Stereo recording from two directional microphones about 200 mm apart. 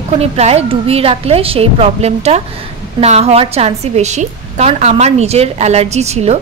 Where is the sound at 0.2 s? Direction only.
30° right (ahead or behind).